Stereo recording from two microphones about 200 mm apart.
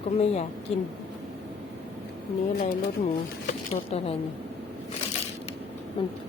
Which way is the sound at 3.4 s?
30° left (ahead or behind).